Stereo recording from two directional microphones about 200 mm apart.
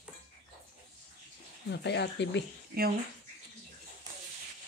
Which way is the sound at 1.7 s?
60° left (ahead or behind).